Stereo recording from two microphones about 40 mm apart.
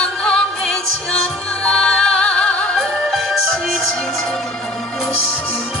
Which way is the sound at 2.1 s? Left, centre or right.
Left.